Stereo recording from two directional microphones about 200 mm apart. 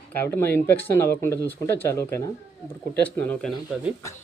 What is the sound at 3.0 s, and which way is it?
Speech, 10° left (ahead or behind).